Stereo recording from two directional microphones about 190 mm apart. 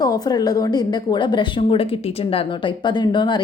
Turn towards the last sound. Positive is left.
turn(degrees=25)  # may be behind; listen again after turning